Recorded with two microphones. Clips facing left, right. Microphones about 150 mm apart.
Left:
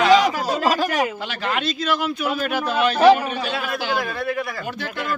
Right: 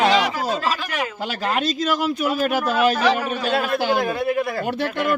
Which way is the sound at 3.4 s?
50° right (ahead or behind).